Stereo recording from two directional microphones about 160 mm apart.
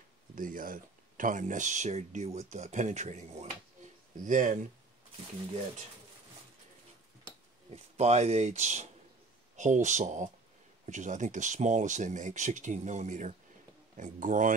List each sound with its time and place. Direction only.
0.4 s speech: 60° right (ahead or behind); by 3.4 s 45° right (ahead or behind)
4.2 s speech: 55° right (ahead or behind)
7.7 s speech: 40° right (ahead or behind)